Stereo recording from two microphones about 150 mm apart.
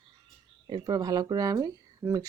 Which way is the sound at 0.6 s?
30° right (ahead or behind).